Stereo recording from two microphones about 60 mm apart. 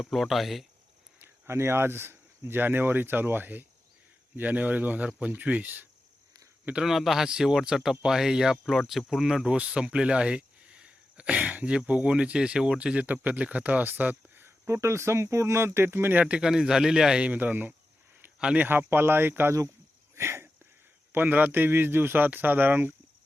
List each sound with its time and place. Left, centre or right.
0.0 s speech: centre
1.2 s speech: right
6.7 s a man's voice: centre
9.4 s speech: centre
13.1 s speech: right
14.7 s speech: right
16.1 s a man's voice: centre
17.3 s speech: right
20.1 s wheeze: right
21.1 s speech: right